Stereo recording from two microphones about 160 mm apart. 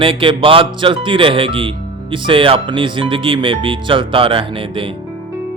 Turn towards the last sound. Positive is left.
turn(degrees=-35)  # may be behind; listen again after turning